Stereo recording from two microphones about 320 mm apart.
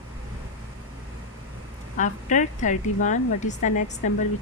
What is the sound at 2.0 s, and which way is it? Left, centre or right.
A woman's voice, left.